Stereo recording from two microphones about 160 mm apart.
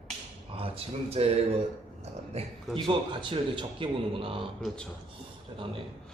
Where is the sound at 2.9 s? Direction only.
30° right (ahead or behind).